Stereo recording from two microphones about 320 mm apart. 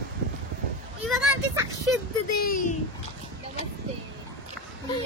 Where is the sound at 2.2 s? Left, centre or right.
Left.